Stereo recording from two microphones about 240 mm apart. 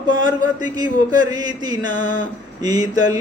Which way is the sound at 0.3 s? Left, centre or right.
Centre.